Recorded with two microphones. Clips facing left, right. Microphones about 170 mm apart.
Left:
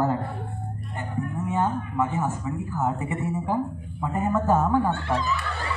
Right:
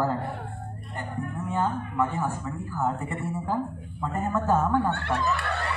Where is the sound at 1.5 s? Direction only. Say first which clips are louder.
Left 2 dB; 20° left (ahead or behind).